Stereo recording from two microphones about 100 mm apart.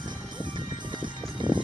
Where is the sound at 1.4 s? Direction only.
50° right (ahead or behind).